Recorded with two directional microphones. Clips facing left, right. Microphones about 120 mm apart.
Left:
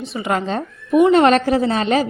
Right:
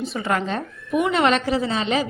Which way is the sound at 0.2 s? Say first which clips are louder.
Left 4 dB; 25° left (ahead or behind).